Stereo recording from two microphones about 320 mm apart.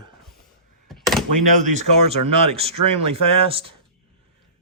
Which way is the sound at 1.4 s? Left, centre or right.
Right.